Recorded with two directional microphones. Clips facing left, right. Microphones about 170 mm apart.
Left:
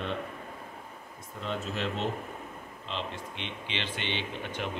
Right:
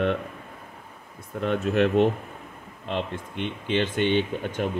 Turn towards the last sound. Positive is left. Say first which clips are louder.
# right 9 dB
turn(degrees=-45)  # may be behind; listen again after turning